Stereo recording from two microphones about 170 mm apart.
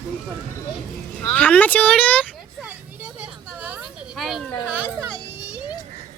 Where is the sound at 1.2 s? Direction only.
10° left (ahead or behind).